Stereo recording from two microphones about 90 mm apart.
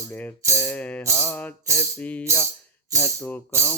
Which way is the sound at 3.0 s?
25° left (ahead or behind).